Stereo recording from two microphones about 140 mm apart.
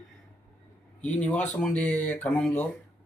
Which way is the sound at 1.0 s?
10° left (ahead or behind).